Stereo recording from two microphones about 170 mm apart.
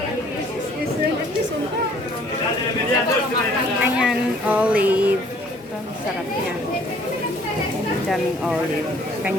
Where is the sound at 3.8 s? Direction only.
5° right (ahead or behind).